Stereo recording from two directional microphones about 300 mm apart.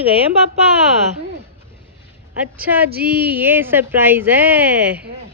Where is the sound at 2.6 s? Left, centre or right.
Centre.